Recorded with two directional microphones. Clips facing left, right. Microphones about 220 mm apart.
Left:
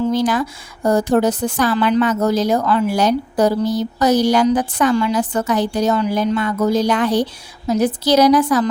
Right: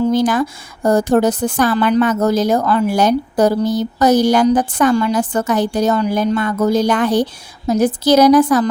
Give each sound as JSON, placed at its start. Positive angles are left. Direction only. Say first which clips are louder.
{"t": 0.1, "sound": "speech", "louder": "right 3 dB", "side_deg": -50}